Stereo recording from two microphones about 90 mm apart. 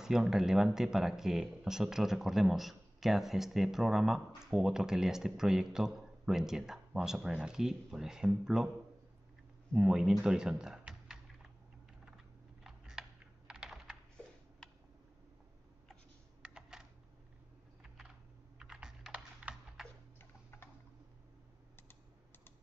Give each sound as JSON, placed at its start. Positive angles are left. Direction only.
{"t": 0.0, "sound": "speech", "side_deg": -5}
{"t": 9.8, "sound": "speech", "side_deg": -5}
{"t": 10.2, "sound": "computer keyboard", "side_deg": -10}
{"t": 12.6, "sound": "typing", "side_deg": -5}
{"t": 16.4, "sound": "computer keyboard", "side_deg": -10}
{"t": 18.6, "sound": "typing", "side_deg": -10}
{"t": 19.8, "sound": "tick-tock", "side_deg": -5}
{"t": 20.2, "sound": "tick-tock", "side_deg": 25}